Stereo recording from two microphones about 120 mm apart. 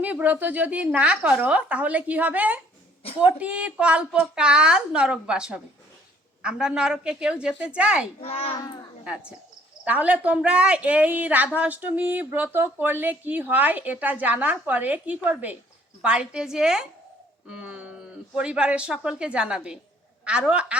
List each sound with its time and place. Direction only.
0.0 s speech: 15° right (ahead or behind)
8.2 s a child's voice: 55° left (ahead or behind)
9.8 s a woman's voice: 10° right (ahead or behind)